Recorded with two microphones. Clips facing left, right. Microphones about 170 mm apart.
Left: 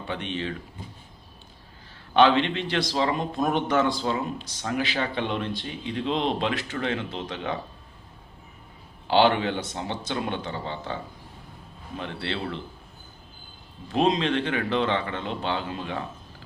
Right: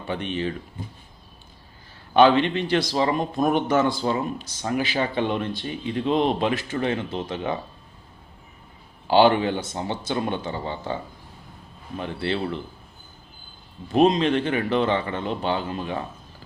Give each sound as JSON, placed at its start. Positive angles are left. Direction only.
{"t": 0.1, "sound": "a man's voice", "side_deg": -5}
{"t": 2.1, "sound": "a man's voice", "side_deg": -5}
{"t": 9.0, "sound": "a man's voice", "side_deg": -5}
{"t": 11.9, "sound": "a man's voice", "side_deg": -5}
{"t": 13.9, "sound": "a man's voice", "side_deg": -5}